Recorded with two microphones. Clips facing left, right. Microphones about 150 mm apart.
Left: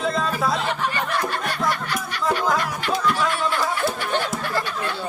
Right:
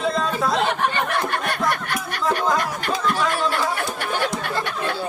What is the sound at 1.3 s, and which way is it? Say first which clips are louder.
Snicker: right 2 dB; 55° right (ahead or behind).